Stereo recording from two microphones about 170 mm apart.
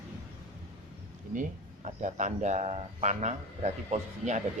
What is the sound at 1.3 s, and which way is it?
Speech, 50° right (ahead or behind).